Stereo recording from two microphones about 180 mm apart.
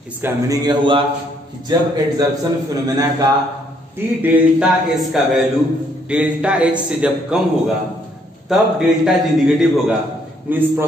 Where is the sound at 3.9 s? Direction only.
10° right (ahead or behind).